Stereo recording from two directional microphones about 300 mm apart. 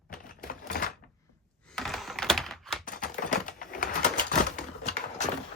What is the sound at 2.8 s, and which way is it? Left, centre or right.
Typewriter, left.